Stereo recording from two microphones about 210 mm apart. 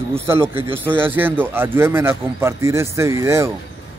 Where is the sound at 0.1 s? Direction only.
10° right (ahead or behind).